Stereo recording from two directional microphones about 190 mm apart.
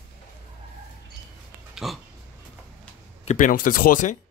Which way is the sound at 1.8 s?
Centre (ahead or behind).